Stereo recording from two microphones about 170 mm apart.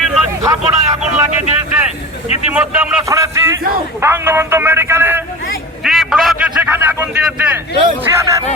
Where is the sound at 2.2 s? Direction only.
40° left (ahead or behind).